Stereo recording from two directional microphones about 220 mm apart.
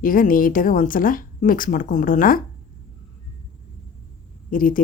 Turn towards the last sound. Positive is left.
turn(degrees=40)  # may be behind; listen again after turning